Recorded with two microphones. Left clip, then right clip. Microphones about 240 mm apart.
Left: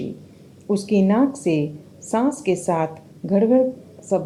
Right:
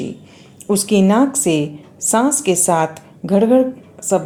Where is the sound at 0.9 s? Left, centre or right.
Right.